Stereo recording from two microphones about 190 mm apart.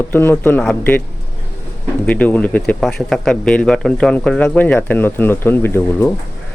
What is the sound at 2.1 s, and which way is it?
A man's voice, 5° left (ahead or behind).